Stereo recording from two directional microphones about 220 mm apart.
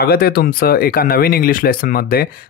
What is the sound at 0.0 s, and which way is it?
Speech, 45° left (ahead or behind).